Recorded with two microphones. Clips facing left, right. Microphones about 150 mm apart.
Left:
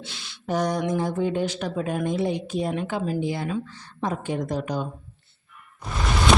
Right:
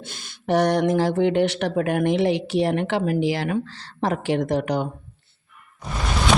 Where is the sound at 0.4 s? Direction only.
70° right (ahead or behind).